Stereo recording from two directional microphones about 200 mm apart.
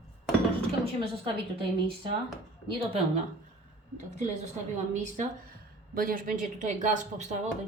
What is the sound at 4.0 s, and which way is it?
Speech, 35° right (ahead or behind).